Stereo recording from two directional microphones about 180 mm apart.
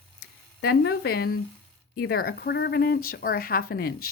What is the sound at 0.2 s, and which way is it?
Speech, 65° left (ahead or behind).